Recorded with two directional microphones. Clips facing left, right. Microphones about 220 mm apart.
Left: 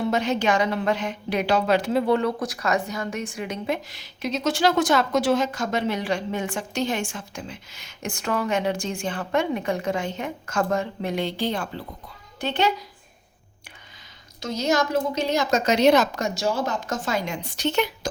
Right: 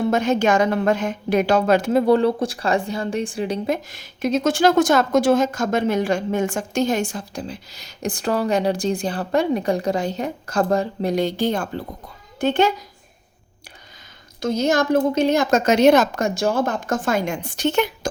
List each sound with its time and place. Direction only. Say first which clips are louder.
0.0 s a woman's voice: right 4 dB; 50° right (ahead or behind); by 3.8 s 35° right (ahead or behind)
3.8 s a woman's voice: right 7 dB; 50° right (ahead or behind)
14.4 s a woman's voice: right 4 dB; 55° right (ahead or behind)